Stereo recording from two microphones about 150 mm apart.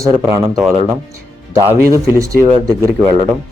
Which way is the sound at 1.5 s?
20° right (ahead or behind).